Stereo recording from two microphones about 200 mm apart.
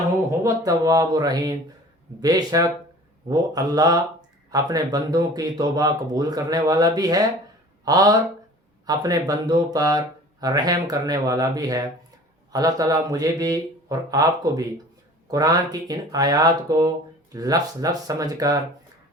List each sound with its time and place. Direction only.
0.3 s speech: 15° right (ahead or behind)